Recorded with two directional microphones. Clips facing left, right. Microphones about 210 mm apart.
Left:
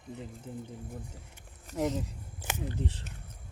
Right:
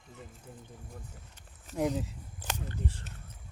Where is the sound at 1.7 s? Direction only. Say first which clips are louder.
Even; centre (ahead or behind).